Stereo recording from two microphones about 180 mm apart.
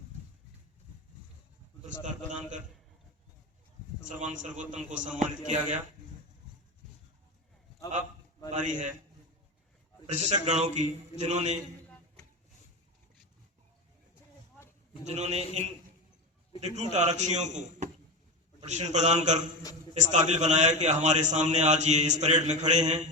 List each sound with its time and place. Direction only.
2.0 s a man's voice: 45° right (ahead or behind)
4.2 s a man's voice: 45° right (ahead or behind)
8.4 s a man's voice: 45° right (ahead or behind)
10.1 s a man's voice: 40° right (ahead or behind)
15.0 s a man's voice: 40° right (ahead or behind)
16.6 s a man's voice: 40° right (ahead or behind)